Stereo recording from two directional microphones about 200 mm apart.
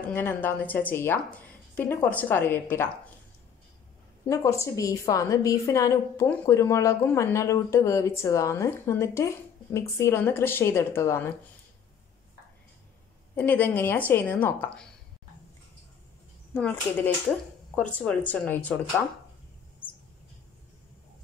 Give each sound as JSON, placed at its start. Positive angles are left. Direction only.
{"t": 0.0, "sound": "a woman's voice", "side_deg": 10}
{"t": 4.3, "sound": "a woman's voice", "side_deg": 15}
{"t": 13.4, "sound": "a woman's voice", "side_deg": 10}
{"t": 16.5, "sound": "a woman's voice", "side_deg": 10}